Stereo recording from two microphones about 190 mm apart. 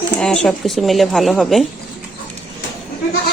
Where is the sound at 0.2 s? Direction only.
5° left (ahead or behind).